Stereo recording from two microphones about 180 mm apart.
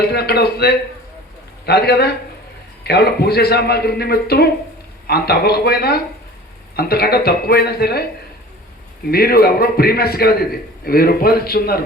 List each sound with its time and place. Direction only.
0.0 s a man's voice: 60° left (ahead or behind)
9.0 s a man's voice: 60° left (ahead or behind)